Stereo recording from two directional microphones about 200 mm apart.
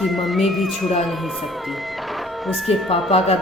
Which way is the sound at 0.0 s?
Centre (ahead or behind).